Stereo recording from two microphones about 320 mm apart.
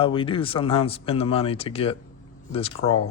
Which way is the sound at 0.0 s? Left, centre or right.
Centre.